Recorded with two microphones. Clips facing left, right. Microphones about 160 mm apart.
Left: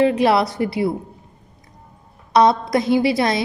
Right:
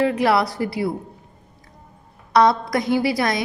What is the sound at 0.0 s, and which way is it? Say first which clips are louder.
Speech: left 3 dB; 25° left (ahead or behind).